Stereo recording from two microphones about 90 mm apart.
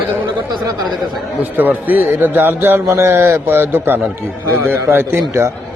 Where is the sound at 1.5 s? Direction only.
20° right (ahead or behind).